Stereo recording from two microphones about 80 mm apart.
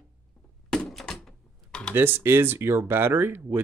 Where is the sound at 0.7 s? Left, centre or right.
Centre.